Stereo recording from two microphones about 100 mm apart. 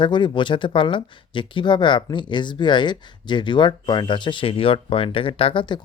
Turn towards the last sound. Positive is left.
turn(degrees=55)  # may be behind; listen again after turning